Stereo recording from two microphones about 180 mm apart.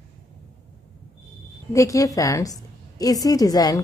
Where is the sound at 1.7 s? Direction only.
20° left (ahead or behind).